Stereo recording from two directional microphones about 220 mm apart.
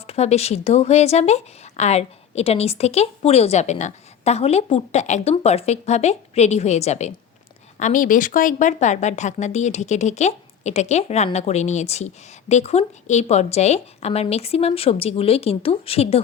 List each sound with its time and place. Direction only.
0.1 s speech: 30° left (ahead or behind)